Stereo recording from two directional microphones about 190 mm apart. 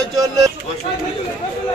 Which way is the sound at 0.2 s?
20° right (ahead or behind).